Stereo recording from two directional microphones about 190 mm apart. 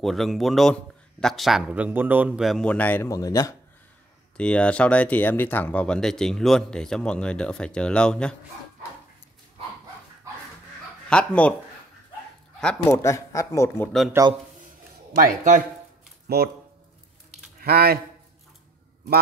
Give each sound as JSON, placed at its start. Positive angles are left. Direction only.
{"t": 0.0, "sound": "speech", "side_deg": 0}
{"t": 4.4, "sound": "speech", "side_deg": 5}
{"t": 11.1, "sound": "speech", "side_deg": 5}
{"t": 12.5, "sound": "a man's voice", "side_deg": 10}
{"t": 14.2, "sound": "a man's voice", "side_deg": -15}
{"t": 15.1, "sound": "speech", "side_deg": -45}
{"t": 16.4, "sound": "speech", "side_deg": -55}
{"t": 17.6, "sound": "speech", "side_deg": -55}